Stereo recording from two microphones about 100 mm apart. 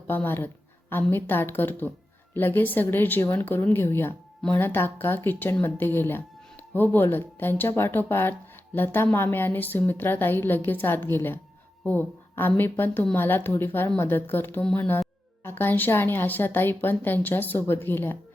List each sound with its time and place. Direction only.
0.1 s a woman's voice: 20° left (ahead or behind)
14.6 s speech: 10° left (ahead or behind)
15.4 s a woman's voice: 20° left (ahead or behind)